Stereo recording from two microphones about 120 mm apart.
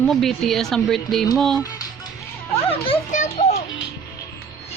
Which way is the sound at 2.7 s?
50° left (ahead or behind).